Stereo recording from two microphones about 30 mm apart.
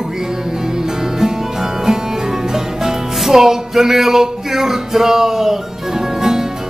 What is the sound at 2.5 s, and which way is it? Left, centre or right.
Music, centre.